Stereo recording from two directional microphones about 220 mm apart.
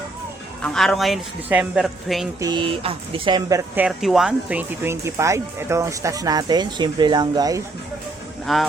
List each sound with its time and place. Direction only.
0.6 s speech: centre (ahead or behind)
2.4 s speech: 20° right (ahead or behind)
3.8 s speech: centre (ahead or behind)
8.5 s speech: centre (ahead or behind)